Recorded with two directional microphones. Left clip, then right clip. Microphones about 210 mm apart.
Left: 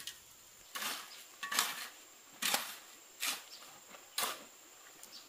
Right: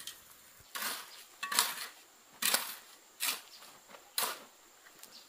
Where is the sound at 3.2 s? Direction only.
25° right (ahead or behind).